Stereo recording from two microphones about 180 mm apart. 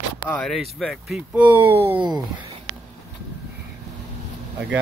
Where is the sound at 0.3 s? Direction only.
5° left (ahead or behind).